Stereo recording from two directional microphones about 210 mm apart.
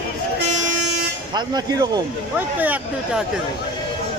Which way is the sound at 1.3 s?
20° right (ahead or behind).